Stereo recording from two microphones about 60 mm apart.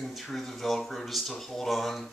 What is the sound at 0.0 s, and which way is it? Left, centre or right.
Speech, centre.